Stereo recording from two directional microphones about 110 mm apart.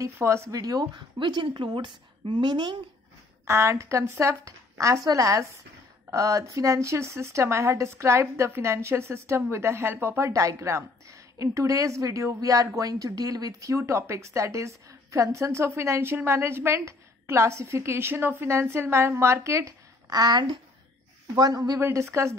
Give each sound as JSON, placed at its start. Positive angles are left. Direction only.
{"t": 0.0, "sound": "a woman's voice", "side_deg": -25}
{"t": 3.4, "sound": "a woman's voice", "side_deg": -25}